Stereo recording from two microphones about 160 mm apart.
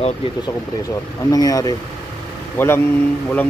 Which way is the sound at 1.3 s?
20° left (ahead or behind).